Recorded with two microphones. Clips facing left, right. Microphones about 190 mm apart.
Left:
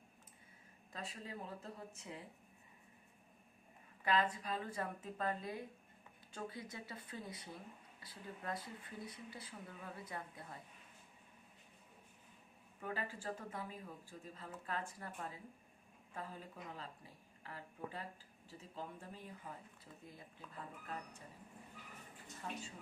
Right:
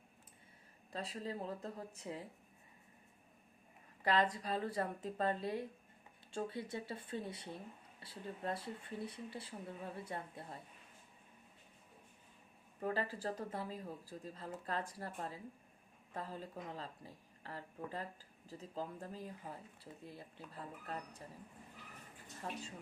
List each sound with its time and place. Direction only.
0.9 s speech: 35° right (ahead or behind)
4.0 s speech: 35° right (ahead or behind)
12.8 s speech: 35° right (ahead or behind)
22.4 s speech: 35° right (ahead or behind)